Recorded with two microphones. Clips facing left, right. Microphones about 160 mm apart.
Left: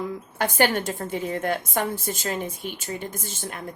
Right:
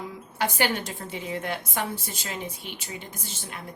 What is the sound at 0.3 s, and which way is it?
A woman's voice, 50° left (ahead or behind).